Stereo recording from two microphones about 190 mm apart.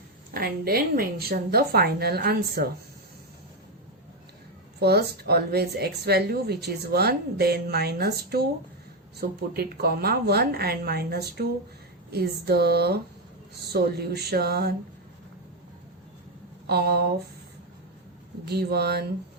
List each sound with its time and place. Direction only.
0.3 s a woman's voice: 55° right (ahead or behind)
4.8 s a woman's voice: 60° right (ahead or behind)
16.6 s a woman's voice: 55° right (ahead or behind)
18.4 s a woman's voice: 60° right (ahead or behind)